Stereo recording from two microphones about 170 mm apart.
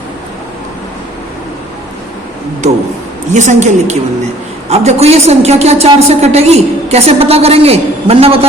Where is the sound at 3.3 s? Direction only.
45° right (ahead or behind).